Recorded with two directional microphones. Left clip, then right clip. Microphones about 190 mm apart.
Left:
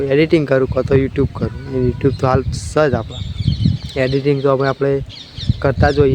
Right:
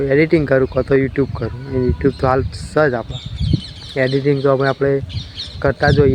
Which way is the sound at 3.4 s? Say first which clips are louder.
Right 1 dB; 20° right (ahead or behind).